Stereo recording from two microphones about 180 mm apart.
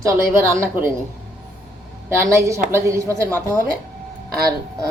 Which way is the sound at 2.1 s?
15° right (ahead or behind).